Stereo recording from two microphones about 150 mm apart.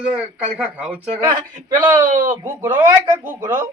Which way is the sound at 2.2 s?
20° right (ahead or behind).